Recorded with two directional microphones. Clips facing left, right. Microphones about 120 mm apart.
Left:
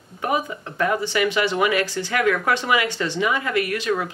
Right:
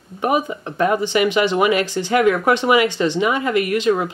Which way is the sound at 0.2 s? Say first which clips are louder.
Right 4 dB; 20° right (ahead or behind).